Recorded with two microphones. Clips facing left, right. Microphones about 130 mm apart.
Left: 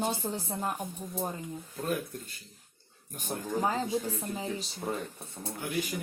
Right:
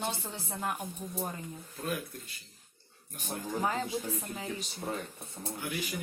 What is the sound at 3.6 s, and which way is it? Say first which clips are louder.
Speech: left 3 dB; 30° left (ahead or behind).